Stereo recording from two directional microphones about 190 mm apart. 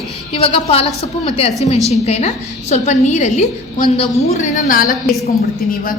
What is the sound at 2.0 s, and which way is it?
A woman's voice, 35° left (ahead or behind).